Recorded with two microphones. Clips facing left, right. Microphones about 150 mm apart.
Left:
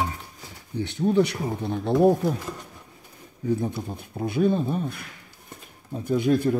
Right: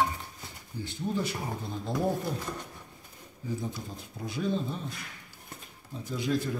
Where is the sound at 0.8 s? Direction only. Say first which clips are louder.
Left 11 dB; 70° left (ahead or behind).